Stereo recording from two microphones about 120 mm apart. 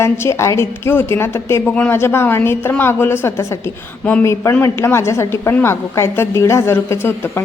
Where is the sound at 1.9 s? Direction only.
20° left (ahead or behind).